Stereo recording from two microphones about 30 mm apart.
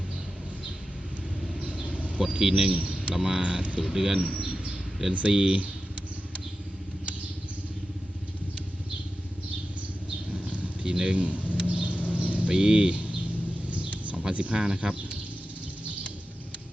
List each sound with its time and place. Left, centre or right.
1.6 s a sound: right
2.4 s speech: right
3.2 s speech: right
3.4 s a man's voice: right
3.8 s speech: centre
5.3 s speech: right
10.4 s a sound: right
10.8 s a man's voice: right
11.6 s a sound: right
12.5 s speech: right
14.5 s speech: right